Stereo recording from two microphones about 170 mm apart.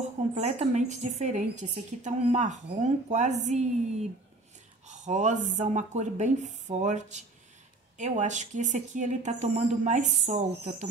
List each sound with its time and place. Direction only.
0.3 s speech: 40° right (ahead or behind)